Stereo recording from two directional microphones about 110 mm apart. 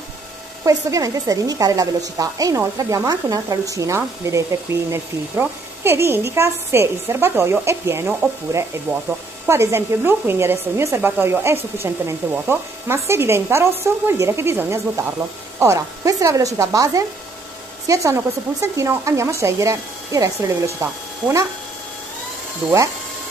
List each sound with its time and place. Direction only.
0.7 s a woman's voice: 30° right (ahead or behind)
9.5 s speech: 25° right (ahead or behind)